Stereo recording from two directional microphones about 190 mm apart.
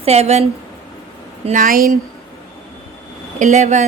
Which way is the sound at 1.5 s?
45° right (ahead or behind).